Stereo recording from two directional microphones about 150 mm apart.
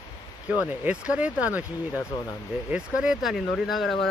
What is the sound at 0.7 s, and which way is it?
Speech, 10° right (ahead or behind).